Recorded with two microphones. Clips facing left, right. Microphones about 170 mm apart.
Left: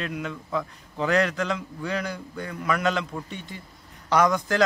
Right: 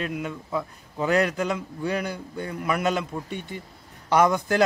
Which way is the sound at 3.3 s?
55° right (ahead or behind).